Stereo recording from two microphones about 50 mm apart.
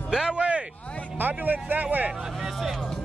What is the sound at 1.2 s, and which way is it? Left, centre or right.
Speech, right.